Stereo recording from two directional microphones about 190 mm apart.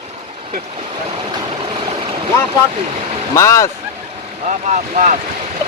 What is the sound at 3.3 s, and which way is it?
Speech, 15° left (ahead or behind).